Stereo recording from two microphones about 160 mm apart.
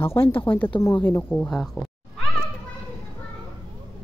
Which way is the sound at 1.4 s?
5° left (ahead or behind).